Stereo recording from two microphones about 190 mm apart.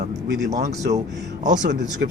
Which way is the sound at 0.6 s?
40° right (ahead or behind).